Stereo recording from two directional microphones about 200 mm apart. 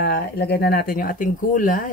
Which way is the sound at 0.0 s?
50° left (ahead or behind).